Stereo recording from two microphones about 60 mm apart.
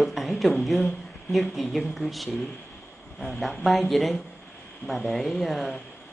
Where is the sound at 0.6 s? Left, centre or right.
Centre.